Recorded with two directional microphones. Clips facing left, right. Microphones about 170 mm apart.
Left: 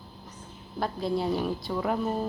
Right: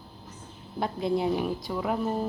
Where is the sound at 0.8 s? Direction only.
20° right (ahead or behind); by 2.2 s 5° right (ahead or behind).